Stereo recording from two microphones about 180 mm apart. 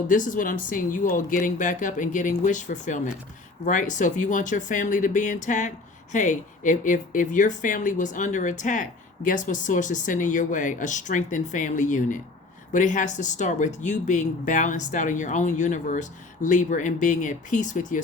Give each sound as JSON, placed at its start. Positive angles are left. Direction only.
{"t": 0.1, "sound": "speech", "side_deg": 45}